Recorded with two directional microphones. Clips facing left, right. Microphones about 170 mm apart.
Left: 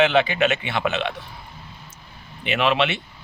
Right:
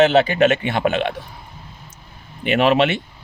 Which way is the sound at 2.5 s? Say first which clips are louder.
Right 5 dB; 45° right (ahead or behind).